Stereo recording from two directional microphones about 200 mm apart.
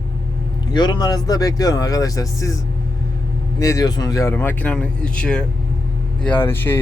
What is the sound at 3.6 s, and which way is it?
Speech, 15° left (ahead or behind).